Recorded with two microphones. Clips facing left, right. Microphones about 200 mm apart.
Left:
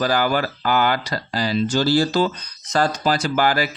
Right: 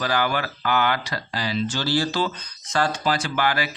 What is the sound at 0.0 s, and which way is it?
Speech, 40° left (ahead or behind).